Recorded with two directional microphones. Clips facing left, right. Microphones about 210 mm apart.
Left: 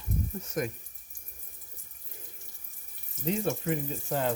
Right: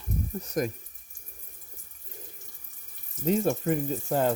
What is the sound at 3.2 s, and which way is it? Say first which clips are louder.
Speech: right 5 dB; 45° right (ahead or behind).